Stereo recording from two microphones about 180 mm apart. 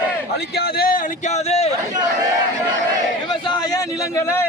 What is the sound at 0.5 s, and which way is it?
Speech, 55° left (ahead or behind).